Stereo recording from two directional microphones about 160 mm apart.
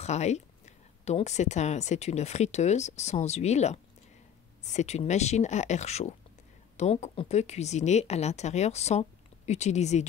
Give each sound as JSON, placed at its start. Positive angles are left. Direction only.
{"t": 0.0, "sound": "a woman's voice", "side_deg": 45}